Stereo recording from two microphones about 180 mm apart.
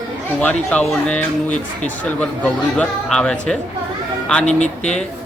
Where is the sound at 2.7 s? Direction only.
5° left (ahead or behind).